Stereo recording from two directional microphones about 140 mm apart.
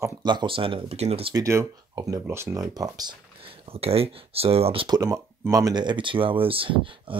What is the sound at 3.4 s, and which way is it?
Speech, 45° right (ahead or behind).